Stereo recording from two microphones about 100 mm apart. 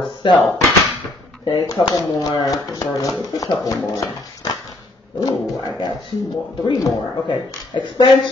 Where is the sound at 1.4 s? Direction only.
40° left (ahead or behind).